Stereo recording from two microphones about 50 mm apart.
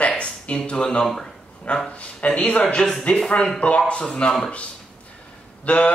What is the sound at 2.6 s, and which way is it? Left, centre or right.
A man's voice, centre.